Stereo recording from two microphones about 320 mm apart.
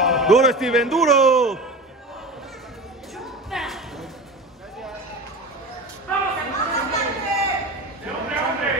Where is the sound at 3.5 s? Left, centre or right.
Centre.